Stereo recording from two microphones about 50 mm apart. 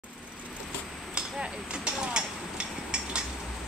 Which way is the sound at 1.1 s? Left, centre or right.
Centre.